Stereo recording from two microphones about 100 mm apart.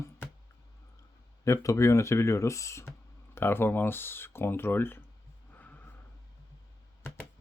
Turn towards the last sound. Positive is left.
turn(degrees=15)  # may be behind; listen again after turning